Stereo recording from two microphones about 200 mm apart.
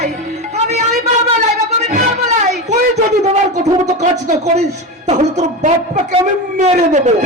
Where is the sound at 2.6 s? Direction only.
35° right (ahead or behind).